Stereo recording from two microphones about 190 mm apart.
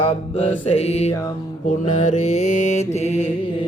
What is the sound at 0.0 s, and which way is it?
Mantra, 35° left (ahead or behind).